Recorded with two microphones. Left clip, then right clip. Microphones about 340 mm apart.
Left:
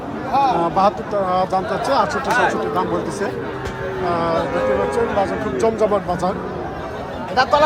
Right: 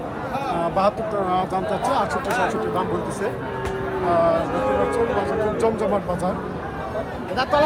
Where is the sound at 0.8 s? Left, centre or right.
Centre.